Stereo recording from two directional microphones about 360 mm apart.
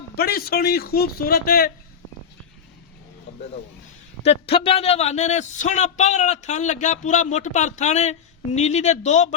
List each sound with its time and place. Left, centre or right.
0.2 s a man's voice: left
4.2 s a man's voice: centre